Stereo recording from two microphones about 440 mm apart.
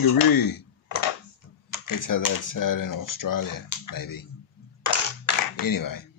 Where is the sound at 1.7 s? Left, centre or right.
Left.